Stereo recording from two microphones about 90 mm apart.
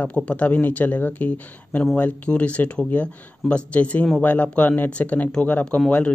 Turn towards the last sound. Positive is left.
turn(degrees=15)  # may be behind; listen again after turning